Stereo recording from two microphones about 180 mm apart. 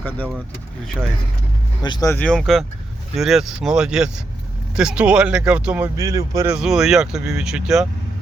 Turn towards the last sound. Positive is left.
turn(degrees=-5)  # may be behind; listen again after turning